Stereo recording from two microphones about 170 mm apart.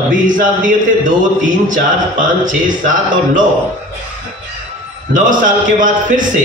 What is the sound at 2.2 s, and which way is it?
A man's voice, 50° right (ahead or behind).